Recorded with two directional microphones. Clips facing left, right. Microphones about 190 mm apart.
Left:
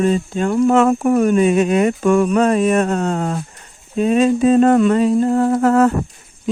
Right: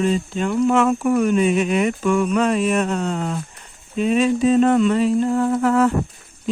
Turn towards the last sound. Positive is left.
turn(degrees=45)  # may be behind; listen again after turning